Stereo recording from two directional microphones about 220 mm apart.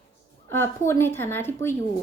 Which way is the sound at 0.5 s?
10° left (ahead or behind).